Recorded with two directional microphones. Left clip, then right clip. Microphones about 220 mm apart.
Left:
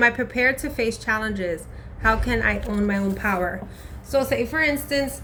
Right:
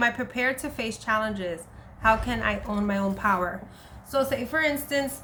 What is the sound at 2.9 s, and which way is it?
A woman's voice, 55° right (ahead or behind).